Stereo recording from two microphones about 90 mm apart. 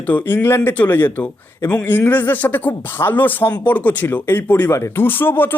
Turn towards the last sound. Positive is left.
turn(degrees=25)  # may be behind; listen again after turning